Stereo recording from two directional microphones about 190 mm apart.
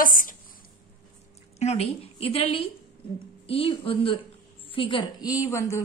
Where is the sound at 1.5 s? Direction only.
35° left (ahead or behind).